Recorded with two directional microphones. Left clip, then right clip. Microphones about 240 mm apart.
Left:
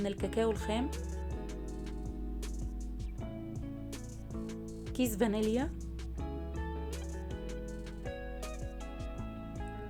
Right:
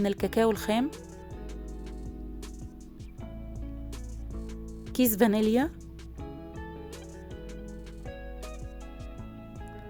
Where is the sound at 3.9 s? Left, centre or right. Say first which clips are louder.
Even; centre.